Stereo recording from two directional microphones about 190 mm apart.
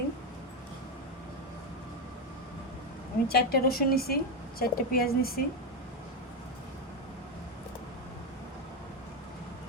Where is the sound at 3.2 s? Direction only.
55° left (ahead or behind).